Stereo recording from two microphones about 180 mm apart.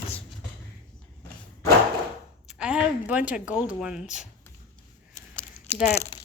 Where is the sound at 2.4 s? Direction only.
5° right (ahead or behind).